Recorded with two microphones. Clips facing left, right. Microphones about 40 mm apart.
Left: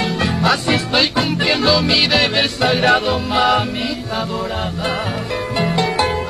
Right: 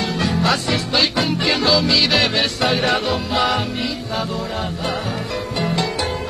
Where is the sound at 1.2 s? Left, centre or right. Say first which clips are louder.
Left 2 dB; centre.